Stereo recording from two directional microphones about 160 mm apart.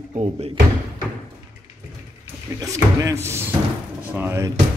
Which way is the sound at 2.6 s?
20° right (ahead or behind).